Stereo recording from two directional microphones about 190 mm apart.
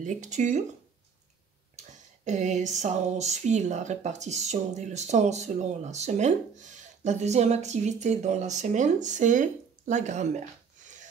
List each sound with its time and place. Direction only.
0.0 s speech: 40° right (ahead or behind)
2.2 s speech: 40° right (ahead or behind)
10.8 s a sound: 40° right (ahead or behind)